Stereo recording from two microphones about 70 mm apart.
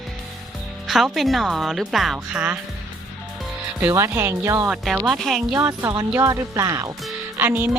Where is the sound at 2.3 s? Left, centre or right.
Right.